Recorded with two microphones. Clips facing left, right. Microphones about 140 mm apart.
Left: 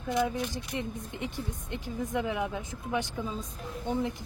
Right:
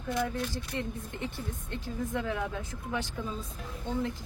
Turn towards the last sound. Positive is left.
turn(degrees=20)  # may be behind; listen again after turning